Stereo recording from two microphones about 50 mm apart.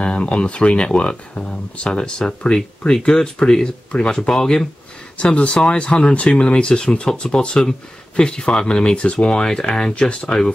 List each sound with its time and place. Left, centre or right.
0.0 s speech: left
5.1 s speech: left